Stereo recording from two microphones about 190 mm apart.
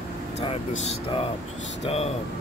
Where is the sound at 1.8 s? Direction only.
30° left (ahead or behind).